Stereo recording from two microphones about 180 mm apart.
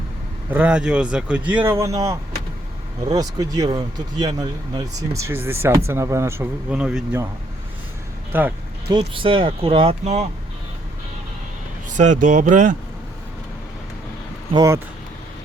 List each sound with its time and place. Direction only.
0.5 s speech: 5° right (ahead or behind)
3.1 s speech: 20° right (ahead or behind); by 7.2 s 5° right (ahead or behind)
8.3 s speech: 10° right (ahead or behind)
9.0 s speech: 30° right (ahead or behind)
11.9 s speech: 45° right (ahead or behind)
14.5 s speech: 20° right (ahead or behind)